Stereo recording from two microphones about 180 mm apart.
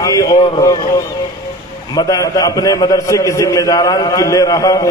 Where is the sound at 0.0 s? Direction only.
20° left (ahead or behind).